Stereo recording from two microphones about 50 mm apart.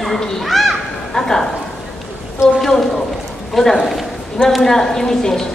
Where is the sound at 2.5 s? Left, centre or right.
Centre.